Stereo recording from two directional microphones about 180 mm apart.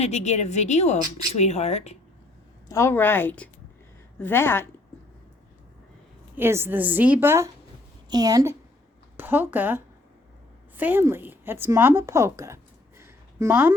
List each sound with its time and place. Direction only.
0.0 s a woman's voice: 40° left (ahead or behind)
2.6 s a woman's voice: 15° left (ahead or behind)
6.3 s a woman's voice: 15° right (ahead or behind)
13.0 s a sound: 15° right (ahead or behind)